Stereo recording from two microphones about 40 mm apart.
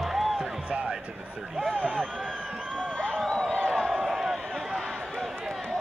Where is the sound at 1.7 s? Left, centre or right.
Left.